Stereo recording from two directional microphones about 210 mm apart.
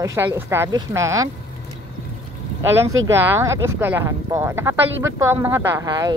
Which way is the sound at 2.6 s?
10° right (ahead or behind).